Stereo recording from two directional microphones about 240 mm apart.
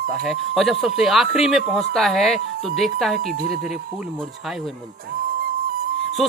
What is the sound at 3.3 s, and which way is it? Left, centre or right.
Speech, right.